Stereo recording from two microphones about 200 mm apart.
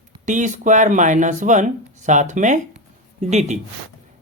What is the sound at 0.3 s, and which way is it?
Speech, 40° right (ahead or behind).